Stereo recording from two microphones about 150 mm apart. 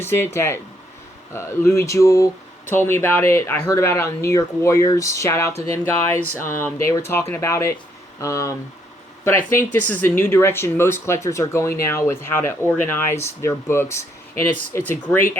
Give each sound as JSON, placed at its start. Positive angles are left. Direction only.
{"t": 0.0, "sound": "speech", "side_deg": 15}
{"t": 9.9, "sound": "speech", "side_deg": 15}